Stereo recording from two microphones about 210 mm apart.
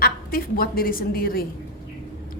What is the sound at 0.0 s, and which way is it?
A woman's voice, 45° left (ahead or behind).